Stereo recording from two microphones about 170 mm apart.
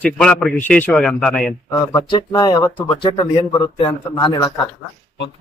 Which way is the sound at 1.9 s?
25° left (ahead or behind).